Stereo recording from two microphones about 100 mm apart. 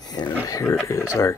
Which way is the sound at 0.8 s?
30° left (ahead or behind).